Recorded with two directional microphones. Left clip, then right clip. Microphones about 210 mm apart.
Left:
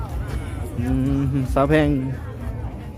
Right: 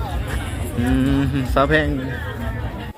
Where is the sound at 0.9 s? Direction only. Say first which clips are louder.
Right 2 dB; centre (ahead or behind); by 1.9 s 20° left (ahead or behind).